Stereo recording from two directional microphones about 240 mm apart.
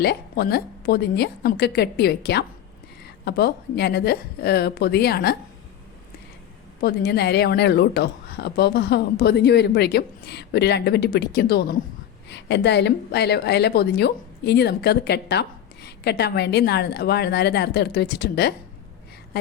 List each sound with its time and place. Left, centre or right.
0.0 s a woman's voice: left
6.8 s a woman's voice: left